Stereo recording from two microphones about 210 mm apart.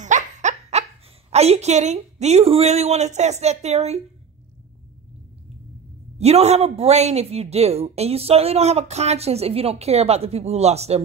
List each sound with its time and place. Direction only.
0.0 s laughter: 35° right (ahead or behind)
1.3 s a woman's voice: 30° right (ahead or behind)
6.1 s a woman's voice: 30° right (ahead or behind)